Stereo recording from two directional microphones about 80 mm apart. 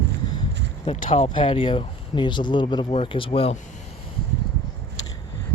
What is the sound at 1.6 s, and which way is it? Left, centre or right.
Speech, left.